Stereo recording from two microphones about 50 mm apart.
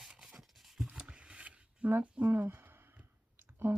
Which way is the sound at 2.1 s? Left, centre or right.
Right.